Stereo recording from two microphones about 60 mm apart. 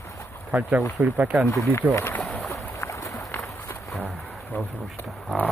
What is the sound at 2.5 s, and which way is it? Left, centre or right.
Boat, left.